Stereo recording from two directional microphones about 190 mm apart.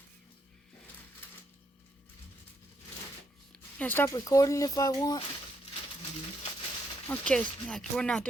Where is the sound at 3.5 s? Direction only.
10° left (ahead or behind).